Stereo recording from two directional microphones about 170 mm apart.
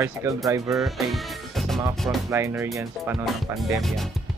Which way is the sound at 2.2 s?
15° right (ahead or behind).